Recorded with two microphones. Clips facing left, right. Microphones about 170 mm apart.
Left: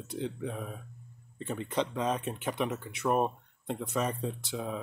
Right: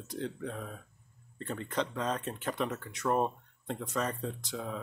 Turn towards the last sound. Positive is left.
turn(degrees=15)  # may be behind; listen again after turning